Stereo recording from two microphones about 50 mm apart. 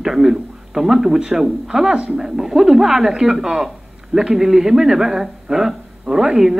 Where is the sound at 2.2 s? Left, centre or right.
Centre.